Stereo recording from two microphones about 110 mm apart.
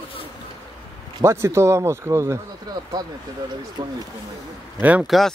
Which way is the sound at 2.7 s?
40° right (ahead or behind).